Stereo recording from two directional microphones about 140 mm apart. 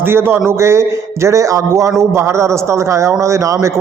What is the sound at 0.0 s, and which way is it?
A man's voice, 15° right (ahead or behind).